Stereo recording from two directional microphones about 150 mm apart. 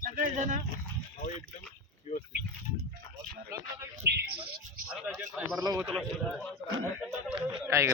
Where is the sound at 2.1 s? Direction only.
55° left (ahead or behind).